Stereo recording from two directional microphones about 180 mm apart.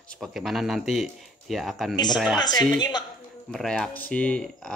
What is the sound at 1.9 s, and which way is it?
Speech, 25° left (ahead or behind).